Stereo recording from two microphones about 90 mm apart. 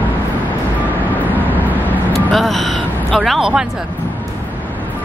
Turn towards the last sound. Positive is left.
turn(degrees=-5)  # may be behind; listen again after turning